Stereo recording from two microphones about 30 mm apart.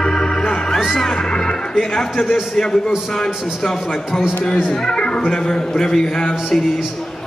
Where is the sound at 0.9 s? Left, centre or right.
Left.